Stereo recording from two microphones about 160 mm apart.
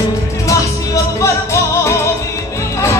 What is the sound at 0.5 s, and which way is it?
Music, 20° left (ahead or behind).